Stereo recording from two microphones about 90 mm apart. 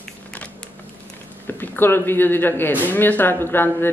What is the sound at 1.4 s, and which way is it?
Speech, 20° left (ahead or behind).